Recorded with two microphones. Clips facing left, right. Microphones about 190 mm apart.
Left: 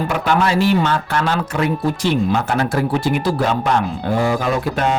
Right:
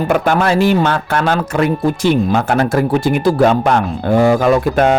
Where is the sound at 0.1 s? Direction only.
50° right (ahead or behind).